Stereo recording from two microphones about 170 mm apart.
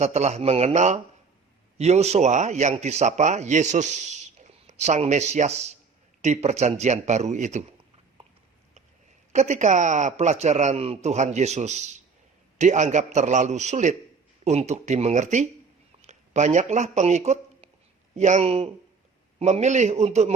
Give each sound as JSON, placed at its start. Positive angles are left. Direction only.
{"t": 0.0, "sound": "a man's voice", "side_deg": -40}
{"t": 9.3, "sound": "a man's voice", "side_deg": -45}